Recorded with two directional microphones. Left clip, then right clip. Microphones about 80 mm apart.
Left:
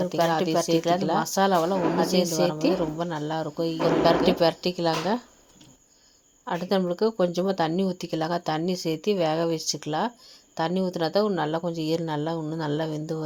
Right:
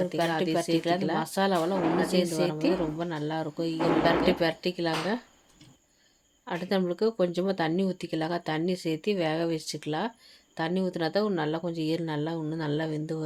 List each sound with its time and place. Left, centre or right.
0.0 s speech: left
3.0 s speech: centre
6.4 s speech: centre